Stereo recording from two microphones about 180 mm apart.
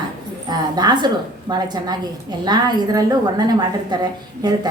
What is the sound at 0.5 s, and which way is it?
A woman's voice, 25° right (ahead or behind).